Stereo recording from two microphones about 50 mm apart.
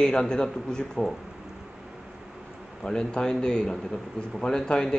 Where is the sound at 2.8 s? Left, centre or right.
Centre.